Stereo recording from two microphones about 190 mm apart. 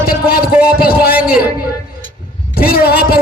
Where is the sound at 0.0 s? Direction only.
50° left (ahead or behind).